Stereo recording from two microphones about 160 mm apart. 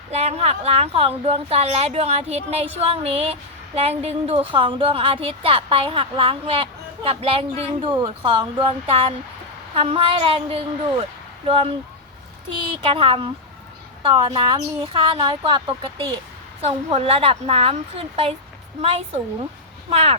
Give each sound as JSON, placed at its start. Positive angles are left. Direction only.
{"t": 0.1, "sound": "a woman's voice", "side_deg": -40}
{"t": 12.8, "sound": "a woman's voice", "side_deg": -35}